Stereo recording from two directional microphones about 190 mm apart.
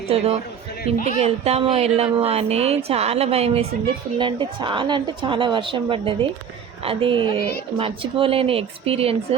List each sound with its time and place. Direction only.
0.1 s a woman's voice: 30° right (ahead or behind)